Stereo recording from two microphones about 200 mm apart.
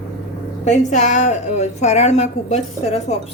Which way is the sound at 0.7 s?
35° left (ahead or behind).